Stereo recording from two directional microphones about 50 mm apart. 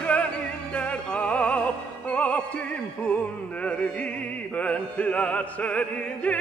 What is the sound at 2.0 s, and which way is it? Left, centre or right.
Opera, left.